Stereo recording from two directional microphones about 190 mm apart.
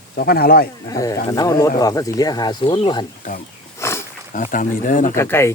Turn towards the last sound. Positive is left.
turn(degrees=15)  # may be behind; listen again after turning